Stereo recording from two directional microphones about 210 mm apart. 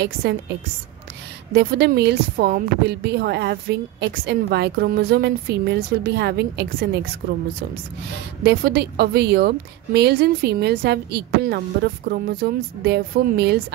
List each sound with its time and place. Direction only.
0.0 s a woman's voice: 50° right (ahead or behind)
1.5 s a woman's voice: 50° right (ahead or behind)
8.5 s a woman's voice: 50° right (ahead or behind)